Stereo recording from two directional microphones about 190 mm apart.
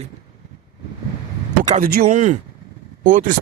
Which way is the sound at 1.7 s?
50° right (ahead or behind).